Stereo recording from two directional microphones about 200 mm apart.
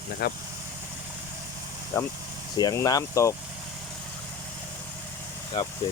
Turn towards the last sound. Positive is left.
turn(degrees=20)  # may be behind; listen again after turning